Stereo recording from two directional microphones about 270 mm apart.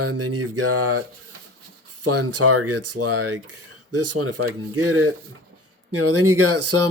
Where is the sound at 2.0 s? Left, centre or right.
Right.